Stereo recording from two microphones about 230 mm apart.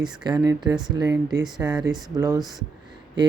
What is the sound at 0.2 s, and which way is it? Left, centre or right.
Speech, centre.